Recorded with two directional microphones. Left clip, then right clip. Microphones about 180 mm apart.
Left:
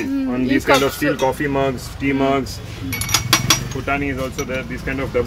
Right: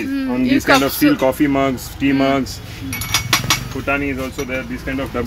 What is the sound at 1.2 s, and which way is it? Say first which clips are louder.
Speech: right 3 dB; 60° right (ahead or behind).